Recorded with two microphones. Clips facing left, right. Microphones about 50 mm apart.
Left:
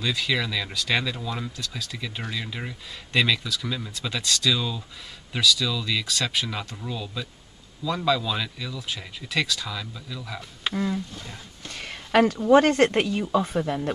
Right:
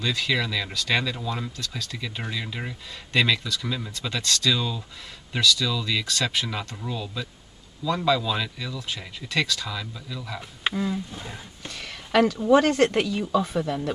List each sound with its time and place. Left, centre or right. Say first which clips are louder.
0.0 s speech: even; centre
11.1 s speech: right 2 dB; centre
11.7 s a sound: left 1 dB; left
12.4 s speech: left 2 dB; left